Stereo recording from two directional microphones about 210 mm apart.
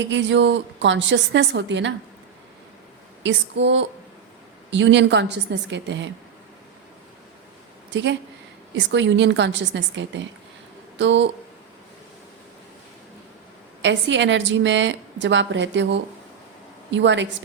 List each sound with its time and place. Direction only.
0.0 s a woman's voice: 60° right (ahead or behind)
3.2 s a woman's voice: 60° right (ahead or behind)
8.7 s a woman's voice: 60° right (ahead or behind)
13.8 s a woman's voice: 60° right (ahead or behind)